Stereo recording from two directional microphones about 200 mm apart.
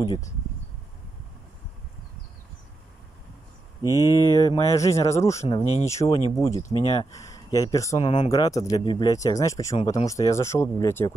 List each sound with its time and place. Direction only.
3.8 s speech: 15° right (ahead or behind)
4.1 s mantra: 20° left (ahead or behind)
5.6 s speech: 20° right (ahead or behind)
5.9 s mantra: 15° left (ahead or behind)
6.8 s speech: 25° left (ahead or behind)
9.0 s mantra: 15° left (ahead or behind)